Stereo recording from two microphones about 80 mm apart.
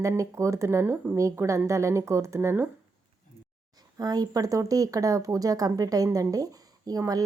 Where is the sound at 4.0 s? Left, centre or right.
Right.